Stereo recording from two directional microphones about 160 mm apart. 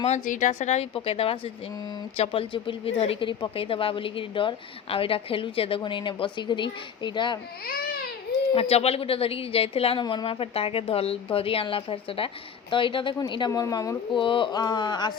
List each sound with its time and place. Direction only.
0.0 s speech: 50° left (ahead or behind); by 7.3 s 30° left (ahead or behind)
8.5 s speech: 40° left (ahead or behind)